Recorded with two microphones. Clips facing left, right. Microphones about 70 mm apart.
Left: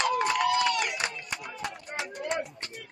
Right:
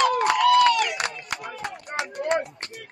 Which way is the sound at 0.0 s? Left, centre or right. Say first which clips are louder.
Right 6 dB; right.